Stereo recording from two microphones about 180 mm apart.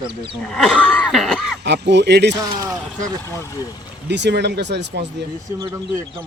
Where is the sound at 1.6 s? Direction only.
70° right (ahead or behind).